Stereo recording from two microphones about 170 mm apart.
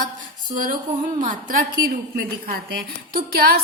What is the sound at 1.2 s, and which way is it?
Speech, 50° right (ahead or behind).